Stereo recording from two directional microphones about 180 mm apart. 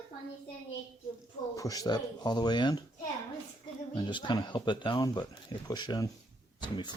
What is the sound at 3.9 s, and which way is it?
Speech, 25° left (ahead or behind).